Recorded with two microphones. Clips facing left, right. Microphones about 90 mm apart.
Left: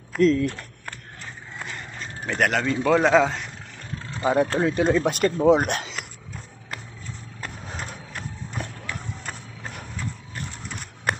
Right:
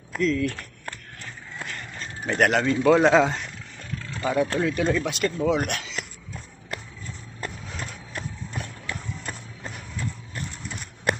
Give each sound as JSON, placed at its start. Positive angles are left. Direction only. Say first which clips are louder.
{"t": 0.2, "sound": "speech", "louder": "left 5 dB", "side_deg": 35}
{"t": 2.2, "sound": "a man's voice", "louder": "right 2 dB", "side_deg": -5}
{"t": 4.0, "sound": "speech", "louder": "left 3 dB", "side_deg": 30}
{"t": 5.0, "sound": "speech", "louder": "left 5 dB", "side_deg": 40}